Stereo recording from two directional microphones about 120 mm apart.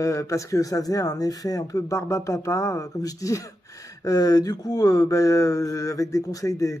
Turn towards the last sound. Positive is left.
turn(degrees=30)  # may be behind; listen again after turning